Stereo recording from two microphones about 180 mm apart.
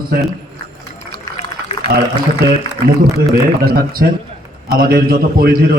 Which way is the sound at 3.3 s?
60° right (ahead or behind).